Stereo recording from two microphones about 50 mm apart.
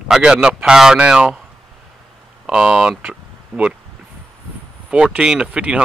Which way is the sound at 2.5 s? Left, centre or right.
Right.